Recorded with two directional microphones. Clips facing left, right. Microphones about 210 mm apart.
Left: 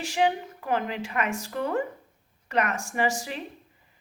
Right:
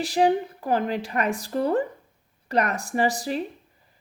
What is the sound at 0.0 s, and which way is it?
A woman's voice, 35° right (ahead or behind).